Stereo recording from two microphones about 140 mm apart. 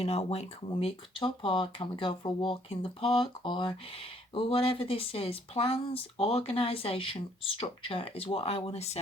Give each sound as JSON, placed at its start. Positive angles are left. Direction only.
{"t": 0.0, "sound": "speech", "side_deg": 50}